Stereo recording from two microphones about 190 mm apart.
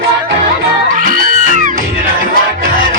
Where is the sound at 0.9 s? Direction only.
45° right (ahead or behind).